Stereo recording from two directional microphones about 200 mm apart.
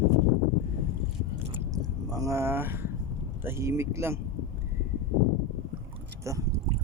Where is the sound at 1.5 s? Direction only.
15° right (ahead or behind).